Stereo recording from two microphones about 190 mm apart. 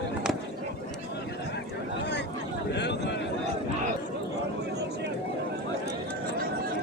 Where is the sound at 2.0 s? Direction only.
65° left (ahead or behind).